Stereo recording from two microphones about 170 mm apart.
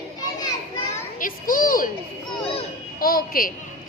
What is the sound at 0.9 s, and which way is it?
Speech, 55° left (ahead or behind).